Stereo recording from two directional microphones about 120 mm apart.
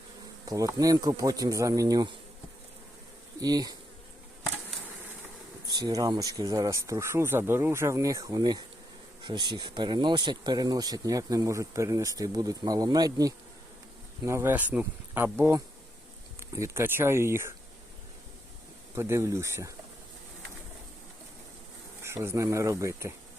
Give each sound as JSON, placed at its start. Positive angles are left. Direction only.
{"t": 0.4, "sound": "speech", "side_deg": -30}
{"t": 3.4, "sound": "speech", "side_deg": -35}
{"t": 5.6, "sound": "speech", "side_deg": -35}
{"t": 18.9, "sound": "speech", "side_deg": -25}
{"t": 22.0, "sound": "speech", "side_deg": -20}